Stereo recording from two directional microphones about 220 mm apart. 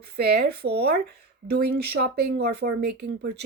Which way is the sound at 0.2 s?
45° right (ahead or behind).